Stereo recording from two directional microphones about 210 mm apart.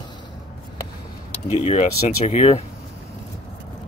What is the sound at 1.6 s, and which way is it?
Speech, 30° left (ahead or behind).